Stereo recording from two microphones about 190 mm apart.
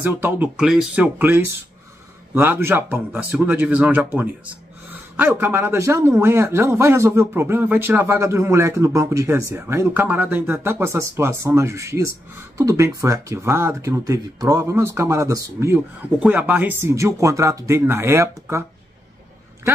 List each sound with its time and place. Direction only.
0.0 s speech: 10° right (ahead or behind)